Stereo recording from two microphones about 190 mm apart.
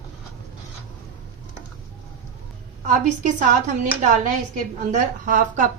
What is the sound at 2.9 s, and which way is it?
A woman's voice, 40° right (ahead or behind).